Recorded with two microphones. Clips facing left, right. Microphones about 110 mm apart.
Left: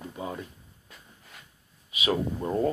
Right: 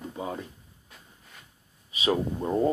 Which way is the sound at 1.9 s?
35° right (ahead or behind).